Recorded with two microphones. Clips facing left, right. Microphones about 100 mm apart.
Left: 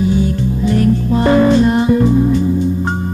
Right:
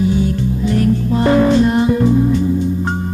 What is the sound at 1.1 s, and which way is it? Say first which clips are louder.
Music: left 1 dB; 30° left (ahead or behind).